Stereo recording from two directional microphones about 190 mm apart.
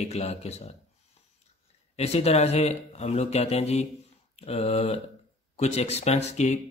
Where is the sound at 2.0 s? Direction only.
35° left (ahead or behind).